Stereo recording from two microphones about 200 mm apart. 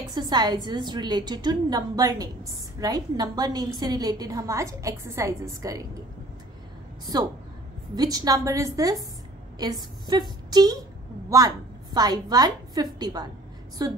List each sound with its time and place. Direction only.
0.1 s a woman's voice: 20° right (ahead or behind)
7.9 s a woman's voice: 20° right (ahead or behind)